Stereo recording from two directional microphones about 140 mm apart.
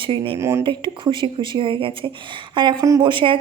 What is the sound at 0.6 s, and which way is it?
A woman's voice, 35° right (ahead or behind).